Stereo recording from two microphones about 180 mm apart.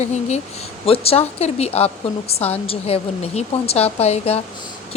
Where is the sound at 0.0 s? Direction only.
40° left (ahead or behind).